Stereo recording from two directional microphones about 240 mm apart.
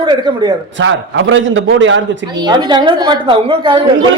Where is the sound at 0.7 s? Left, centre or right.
Right.